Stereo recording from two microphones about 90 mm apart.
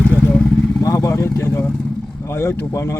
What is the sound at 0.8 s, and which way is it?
Vehicle, 40° left (ahead or behind).